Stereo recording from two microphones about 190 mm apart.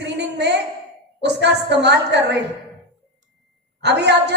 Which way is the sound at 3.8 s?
65° right (ahead or behind).